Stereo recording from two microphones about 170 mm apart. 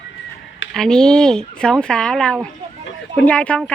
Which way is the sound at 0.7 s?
5° left (ahead or behind).